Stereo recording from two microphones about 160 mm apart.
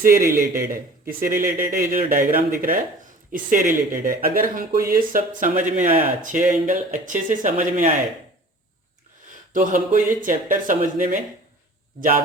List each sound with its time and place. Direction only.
0.0 s speech: 60° right (ahead or behind)
9.5 s speech: 55° right (ahead or behind)